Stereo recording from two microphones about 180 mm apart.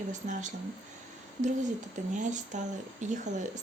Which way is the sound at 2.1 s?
45° right (ahead or behind).